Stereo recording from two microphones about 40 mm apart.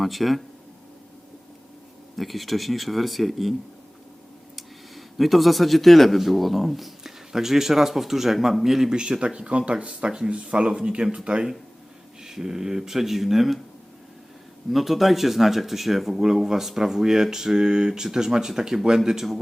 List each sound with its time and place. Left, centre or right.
0.0 s a man's voice: centre
2.1 s a man's voice: centre
4.5 s speech: centre; by 11.2 s right
12.2 s speech: centre
14.7 s speech: centre